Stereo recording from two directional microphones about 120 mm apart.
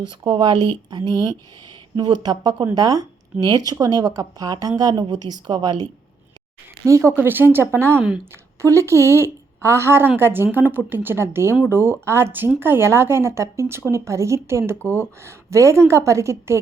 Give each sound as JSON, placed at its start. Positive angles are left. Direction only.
{"t": 0.0, "sound": "a woman's voice", "side_deg": -40}